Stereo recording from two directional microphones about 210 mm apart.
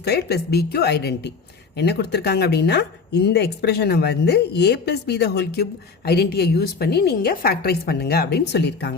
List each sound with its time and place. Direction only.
0.0 s speech: 50° left (ahead or behind)